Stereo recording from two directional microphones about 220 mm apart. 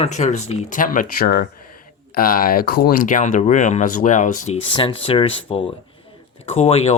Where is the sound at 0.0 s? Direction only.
30° left (ahead or behind).